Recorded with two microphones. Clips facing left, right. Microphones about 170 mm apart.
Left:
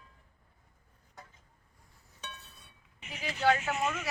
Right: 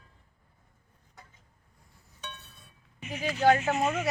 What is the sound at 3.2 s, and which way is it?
Speech, 40° right (ahead or behind).